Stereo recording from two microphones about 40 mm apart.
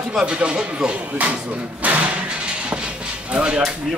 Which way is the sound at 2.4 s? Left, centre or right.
Right.